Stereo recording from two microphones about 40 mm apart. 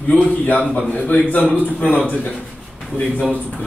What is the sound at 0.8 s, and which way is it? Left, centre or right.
Speech, left.